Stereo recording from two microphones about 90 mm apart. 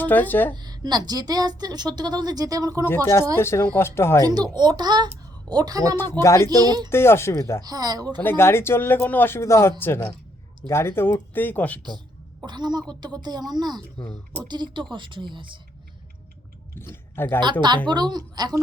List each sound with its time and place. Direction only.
0.0 s speech: 20° left (ahead or behind)
0.5 s a woman's voice: 50° right (ahead or behind)
2.8 s speech: 25° left (ahead or behind)
4.2 s a woman's voice: 45° right (ahead or behind)
6.0 s speech: 30° left (ahead or behind)
6.6 s a woman's voice: 50° right (ahead or behind)
6.9 s speech: 30° left (ahead or behind)
7.6 s a woman's voice: 45° right (ahead or behind)
8.2 s speech: 25° left (ahead or behind)
12.5 s a woman's voice: 55° right (ahead or behind)
16.7 s speech: 25° left (ahead or behind)
17.4 s a woman's voice: 55° right (ahead or behind)